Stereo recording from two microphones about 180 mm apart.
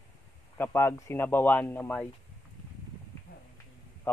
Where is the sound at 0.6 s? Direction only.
15° left (ahead or behind).